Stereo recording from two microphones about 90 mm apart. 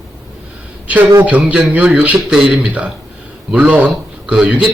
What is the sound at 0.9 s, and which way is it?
A man's voice, 15° right (ahead or behind).